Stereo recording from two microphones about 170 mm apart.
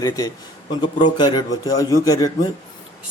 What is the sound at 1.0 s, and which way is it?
A man's voice, 25° left (ahead or behind).